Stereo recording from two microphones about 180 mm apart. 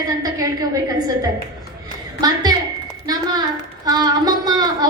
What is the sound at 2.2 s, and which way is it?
Speech, 20° right (ahead or behind).